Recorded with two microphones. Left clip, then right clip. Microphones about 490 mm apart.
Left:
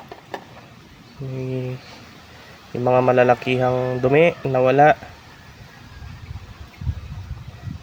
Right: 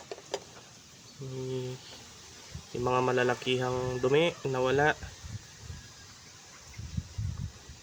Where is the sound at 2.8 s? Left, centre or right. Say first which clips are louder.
Left 12 dB; right.